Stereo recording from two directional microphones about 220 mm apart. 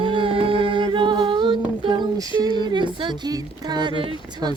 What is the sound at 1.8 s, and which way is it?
Music, 20° right (ahead or behind).